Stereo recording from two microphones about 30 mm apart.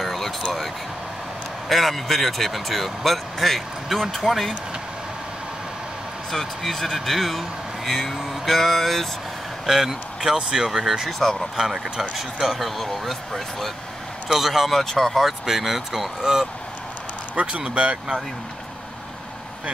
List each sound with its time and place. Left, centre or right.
0.0 s a sound: centre
1.7 s speech: centre
6.3 s speech: centre
9.7 s a man's voice: centre
10.7 s speech: centre
11.1 s speech: centre
11.5 s speech: centre
12.0 s speech: centre
14.3 s speech: centre
14.7 s speech: centre
15.4 s speech: centre
16.2 s speech: centre
17.5 s speech: right